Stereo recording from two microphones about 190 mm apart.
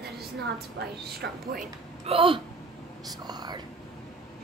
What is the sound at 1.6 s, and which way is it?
A woman's voice, 30° right (ahead or behind).